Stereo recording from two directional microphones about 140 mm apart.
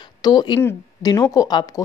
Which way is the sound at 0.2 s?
30° left (ahead or behind).